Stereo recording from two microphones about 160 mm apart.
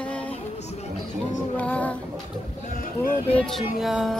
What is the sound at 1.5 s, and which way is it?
Speech, 10° left (ahead or behind).